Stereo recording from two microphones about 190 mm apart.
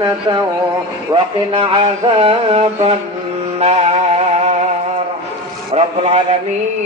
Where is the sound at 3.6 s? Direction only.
30° right (ahead or behind).